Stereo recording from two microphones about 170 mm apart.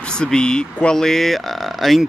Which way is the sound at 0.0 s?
5° left (ahead or behind).